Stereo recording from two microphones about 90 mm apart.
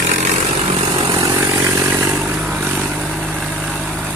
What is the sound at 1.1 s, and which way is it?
Vehicle, 35° right (ahead or behind).